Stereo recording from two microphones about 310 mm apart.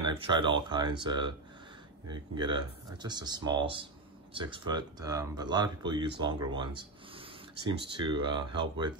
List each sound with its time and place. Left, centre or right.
0.0 s speech: centre